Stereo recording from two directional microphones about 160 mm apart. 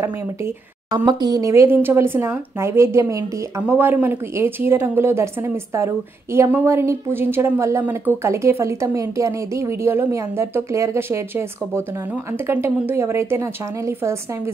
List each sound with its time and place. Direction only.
0.9 s speech: 25° right (ahead or behind)